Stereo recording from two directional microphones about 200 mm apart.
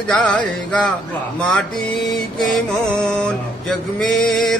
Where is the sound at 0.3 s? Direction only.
5° left (ahead or behind).